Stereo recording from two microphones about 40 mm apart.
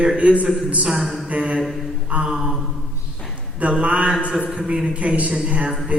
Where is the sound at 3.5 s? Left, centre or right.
Right.